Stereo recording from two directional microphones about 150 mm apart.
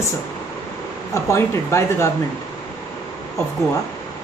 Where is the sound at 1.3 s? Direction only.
20° left (ahead or behind).